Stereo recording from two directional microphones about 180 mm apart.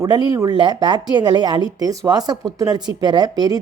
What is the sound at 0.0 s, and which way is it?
A woman's voice, 20° right (ahead or behind).